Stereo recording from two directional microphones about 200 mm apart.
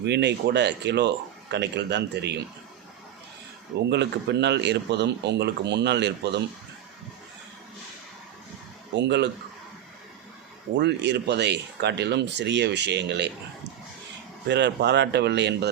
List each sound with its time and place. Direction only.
0.0 s speech: 60° right (ahead or behind)
3.8 s speech: 55° right (ahead or behind)
9.0 s speech: 60° right (ahead or behind)
10.8 s speech: 60° right (ahead or behind)
14.4 s speech: 60° right (ahead or behind)